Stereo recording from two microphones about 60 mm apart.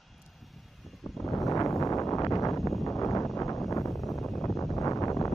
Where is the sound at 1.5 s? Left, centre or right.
Left.